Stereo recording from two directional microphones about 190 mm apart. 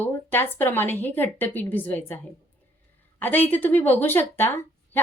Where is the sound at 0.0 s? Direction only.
10° left (ahead or behind).